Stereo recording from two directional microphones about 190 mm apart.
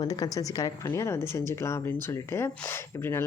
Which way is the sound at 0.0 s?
20° left (ahead or behind).